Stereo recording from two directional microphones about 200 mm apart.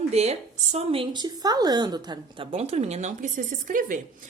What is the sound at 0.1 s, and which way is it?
A woman's voice, 30° right (ahead or behind).